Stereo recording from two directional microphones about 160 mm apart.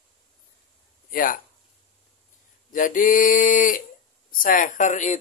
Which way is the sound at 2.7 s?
55° left (ahead or behind).